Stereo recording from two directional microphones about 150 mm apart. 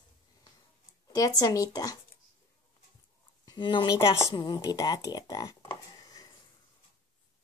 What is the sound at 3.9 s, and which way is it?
Speech, 20° left (ahead or behind).